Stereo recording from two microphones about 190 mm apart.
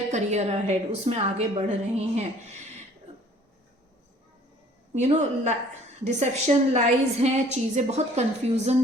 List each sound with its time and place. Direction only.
0.1 s a woman's voice: 35° right (ahead or behind)
4.9 s a woman's voice: 35° right (ahead or behind)